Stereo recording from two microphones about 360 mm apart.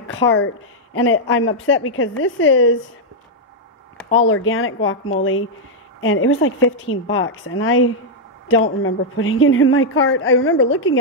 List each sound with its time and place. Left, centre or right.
0.0 s a sound: left
0.9 s a woman's voice: left
4.1 s a woman's voice: left